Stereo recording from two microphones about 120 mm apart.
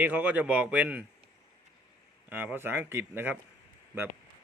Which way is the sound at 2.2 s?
15° right (ahead or behind).